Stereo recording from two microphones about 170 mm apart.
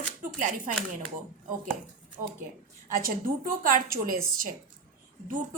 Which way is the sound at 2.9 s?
55° right (ahead or behind).